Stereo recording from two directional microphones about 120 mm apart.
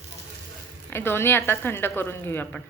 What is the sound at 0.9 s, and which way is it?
A woman's voice, 20° left (ahead or behind).